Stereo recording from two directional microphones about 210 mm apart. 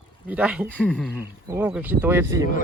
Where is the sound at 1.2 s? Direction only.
10° right (ahead or behind).